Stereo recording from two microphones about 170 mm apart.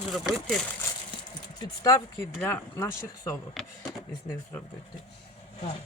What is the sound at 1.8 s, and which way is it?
Speech, 15° left (ahead or behind).